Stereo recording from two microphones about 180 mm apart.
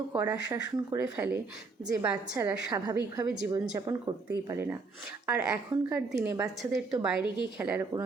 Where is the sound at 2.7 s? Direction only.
20° right (ahead or behind).